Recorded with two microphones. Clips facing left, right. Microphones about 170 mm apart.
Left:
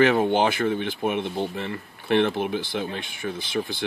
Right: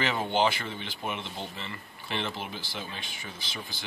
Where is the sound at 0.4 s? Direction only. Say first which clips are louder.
Left 6 dB; 55° left (ahead or behind).